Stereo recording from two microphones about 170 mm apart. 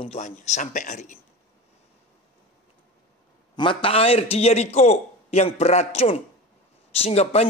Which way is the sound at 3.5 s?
30° left (ahead or behind).